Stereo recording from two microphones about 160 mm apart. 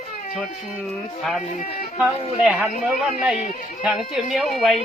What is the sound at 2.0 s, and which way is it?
Speech, 5° right (ahead or behind).